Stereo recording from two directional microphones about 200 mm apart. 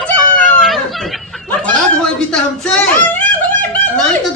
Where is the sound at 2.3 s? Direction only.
5° left (ahead or behind).